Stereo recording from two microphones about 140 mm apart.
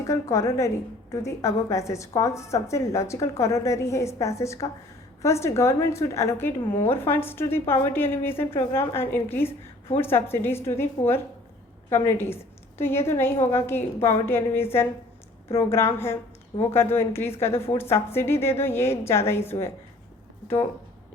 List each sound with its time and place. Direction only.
0.1 s a woman's voice: 20° left (ahead or behind)